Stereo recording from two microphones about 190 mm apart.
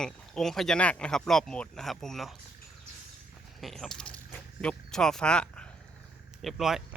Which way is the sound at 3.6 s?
Centre (ahead or behind).